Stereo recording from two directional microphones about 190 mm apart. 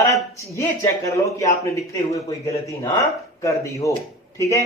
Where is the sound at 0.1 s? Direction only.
15° left (ahead or behind).